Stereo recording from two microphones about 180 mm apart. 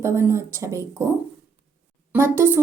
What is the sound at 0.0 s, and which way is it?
A woman's voice, 15° right (ahead or behind).